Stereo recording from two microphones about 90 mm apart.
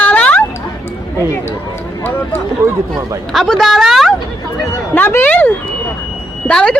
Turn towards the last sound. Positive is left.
turn(degrees=10)  # may be behind; listen again after turning